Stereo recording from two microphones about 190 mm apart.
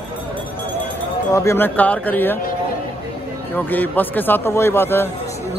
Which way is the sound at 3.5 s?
10° left (ahead or behind).